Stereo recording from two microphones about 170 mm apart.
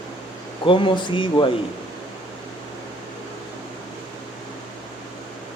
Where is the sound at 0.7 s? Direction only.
30° left (ahead or behind).